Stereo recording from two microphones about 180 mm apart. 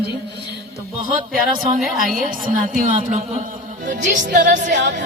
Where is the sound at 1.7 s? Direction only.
Centre (ahead or behind).